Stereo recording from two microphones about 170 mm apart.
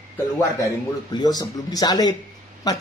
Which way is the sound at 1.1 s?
25° left (ahead or behind).